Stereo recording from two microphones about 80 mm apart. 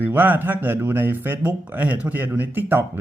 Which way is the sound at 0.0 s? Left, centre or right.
Right.